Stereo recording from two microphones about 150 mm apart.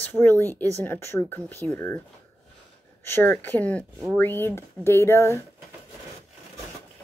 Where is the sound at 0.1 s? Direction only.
15° left (ahead or behind).